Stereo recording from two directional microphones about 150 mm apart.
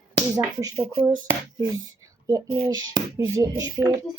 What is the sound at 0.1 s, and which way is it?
Speech, 25° right (ahead or behind).